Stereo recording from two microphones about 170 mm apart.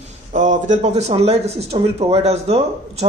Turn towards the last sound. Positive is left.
turn(degrees=-40)  # may be behind; listen again after turning